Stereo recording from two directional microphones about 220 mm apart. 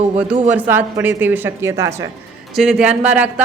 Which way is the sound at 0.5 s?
10° right (ahead or behind).